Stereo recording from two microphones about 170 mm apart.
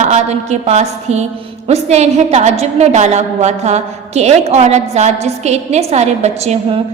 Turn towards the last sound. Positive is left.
turn(degrees=-40)  # may be behind; listen again after turning